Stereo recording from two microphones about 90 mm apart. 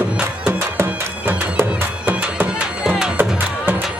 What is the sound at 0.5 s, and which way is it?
Music, 20° right (ahead or behind).